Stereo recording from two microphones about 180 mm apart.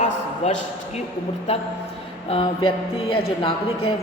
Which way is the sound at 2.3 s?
30° left (ahead or behind).